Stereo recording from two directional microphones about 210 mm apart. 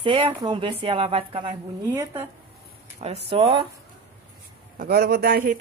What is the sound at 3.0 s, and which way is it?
Speech, 30° right (ahead or behind).